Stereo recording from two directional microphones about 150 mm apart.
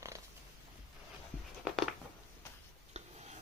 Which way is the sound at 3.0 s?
45° right (ahead or behind).